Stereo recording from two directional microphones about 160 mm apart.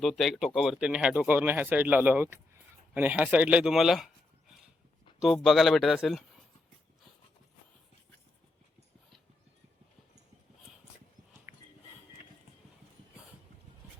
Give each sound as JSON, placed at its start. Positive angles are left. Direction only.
{"t": 0.0, "sound": "speech", "side_deg": 0}
{"t": 5.2, "sound": "a man's voice", "side_deg": 0}
{"t": 11.5, "sound": "a sound", "side_deg": -15}